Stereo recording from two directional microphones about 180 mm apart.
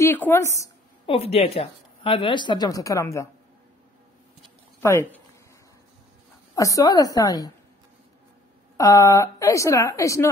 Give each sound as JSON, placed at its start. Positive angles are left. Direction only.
{"t": 0.0, "sound": "a woman's voice", "side_deg": 15}
{"t": 1.0, "sound": "speech", "side_deg": 35}
{"t": 4.7, "sound": "speech", "side_deg": 15}
{"t": 6.5, "sound": "speech", "side_deg": 20}
{"t": 8.7, "sound": "a woman's voice", "side_deg": 20}